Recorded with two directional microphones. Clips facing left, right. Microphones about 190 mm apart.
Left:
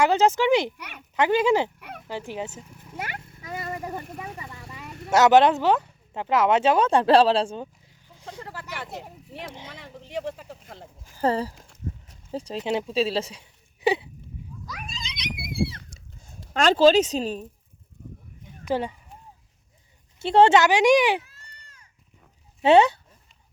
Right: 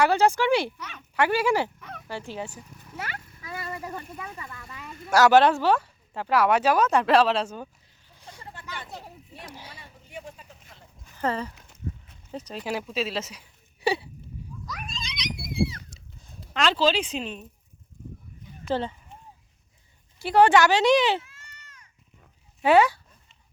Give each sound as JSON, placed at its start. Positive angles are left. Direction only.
{"t": 0.0, "sound": "speech", "side_deg": 20}
{"t": 8.2, "sound": "speech", "side_deg": 85}
{"t": 11.2, "sound": "speech", "side_deg": 35}
{"t": 13.8, "sound": "a sound", "side_deg": 20}
{"t": 14.7, "sound": "a sound", "side_deg": 0}
{"t": 16.2, "sound": "speech", "side_deg": 45}
{"t": 18.6, "sound": "speech", "side_deg": 15}
{"t": 20.1, "sound": "speech", "side_deg": 25}
{"t": 21.2, "sound": "baby cry", "side_deg": 35}
{"t": 22.6, "sound": "speech", "side_deg": 25}